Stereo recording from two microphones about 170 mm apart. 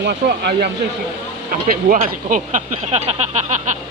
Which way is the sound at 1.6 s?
50° right (ahead or behind).